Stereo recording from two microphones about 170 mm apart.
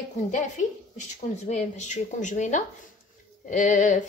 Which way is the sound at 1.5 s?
45° left (ahead or behind).